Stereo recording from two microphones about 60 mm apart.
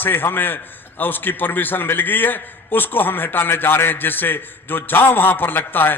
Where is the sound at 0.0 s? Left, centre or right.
Left.